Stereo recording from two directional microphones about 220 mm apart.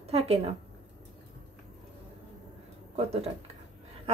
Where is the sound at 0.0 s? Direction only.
25° right (ahead or behind).